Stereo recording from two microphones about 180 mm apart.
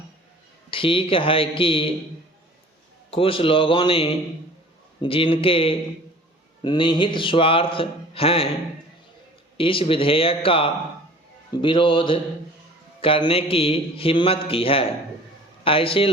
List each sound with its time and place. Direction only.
0.7 s speech: 30° left (ahead or behind)
3.1 s a man's voice: 30° left (ahead or behind)
9.6 s a man's voice: 30° left (ahead or behind)